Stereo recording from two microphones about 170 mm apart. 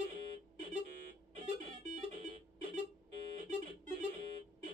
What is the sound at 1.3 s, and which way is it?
Music, 45° right (ahead or behind).